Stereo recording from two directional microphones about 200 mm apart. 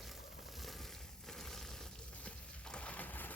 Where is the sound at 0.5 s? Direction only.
Centre (ahead or behind).